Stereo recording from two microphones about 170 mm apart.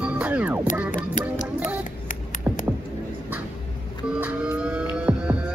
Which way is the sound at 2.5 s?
10° right (ahead or behind).